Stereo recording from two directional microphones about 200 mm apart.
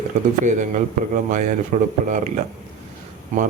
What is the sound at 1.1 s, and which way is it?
Speech, 40° right (ahead or behind).